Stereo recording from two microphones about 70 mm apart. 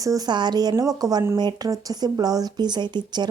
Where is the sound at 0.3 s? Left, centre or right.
Right.